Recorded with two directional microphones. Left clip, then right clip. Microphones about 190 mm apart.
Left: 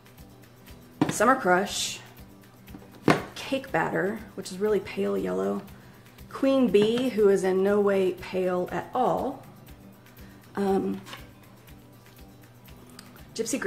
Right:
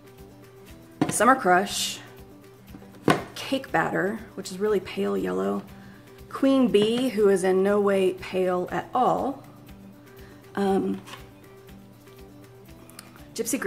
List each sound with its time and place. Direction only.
1.1 s a woman's voice: 20° right (ahead or behind)
3.3 s a woman's voice: 20° right (ahead or behind)
10.5 s speech: 25° right (ahead or behind)
13.3 s speech: 15° right (ahead or behind)